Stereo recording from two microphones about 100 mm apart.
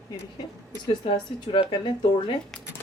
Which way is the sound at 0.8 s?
55° left (ahead or behind).